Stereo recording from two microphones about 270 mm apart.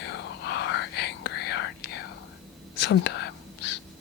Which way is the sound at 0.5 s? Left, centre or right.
Left.